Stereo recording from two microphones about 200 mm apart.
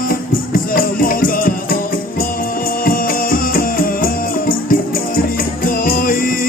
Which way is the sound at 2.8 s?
45° left (ahead or behind).